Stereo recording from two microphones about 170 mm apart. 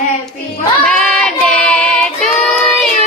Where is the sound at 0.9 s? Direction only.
5° left (ahead or behind).